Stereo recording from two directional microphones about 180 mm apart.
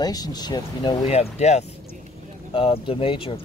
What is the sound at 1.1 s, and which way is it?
Speech, 35° left (ahead or behind).